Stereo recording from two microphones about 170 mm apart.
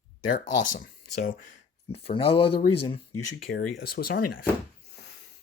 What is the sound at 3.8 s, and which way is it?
Speech, 60° left (ahead or behind).